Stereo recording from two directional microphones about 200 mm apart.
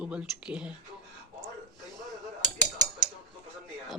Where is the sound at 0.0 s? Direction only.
5° right (ahead or behind).